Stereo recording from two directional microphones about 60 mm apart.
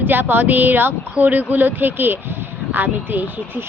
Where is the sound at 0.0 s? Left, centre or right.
Right.